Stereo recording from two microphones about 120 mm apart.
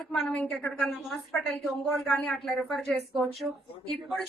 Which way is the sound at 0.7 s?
Centre (ahead or behind).